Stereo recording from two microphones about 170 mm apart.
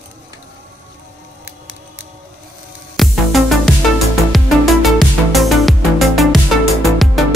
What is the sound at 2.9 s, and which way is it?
Music, centre (ahead or behind).